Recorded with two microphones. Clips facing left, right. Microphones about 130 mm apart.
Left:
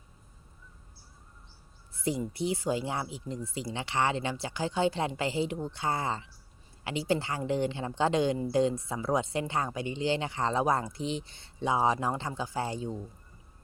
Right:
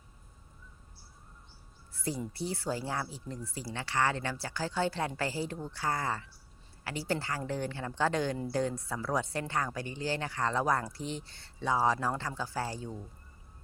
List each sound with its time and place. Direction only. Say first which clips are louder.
1.9 s speech: left 4 dB; 20° left (ahead or behind)